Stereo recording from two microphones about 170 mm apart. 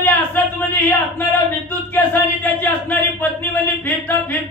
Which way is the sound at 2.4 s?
10° left (ahead or behind).